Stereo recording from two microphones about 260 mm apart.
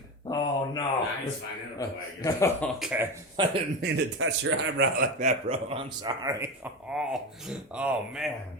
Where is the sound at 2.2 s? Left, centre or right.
Centre.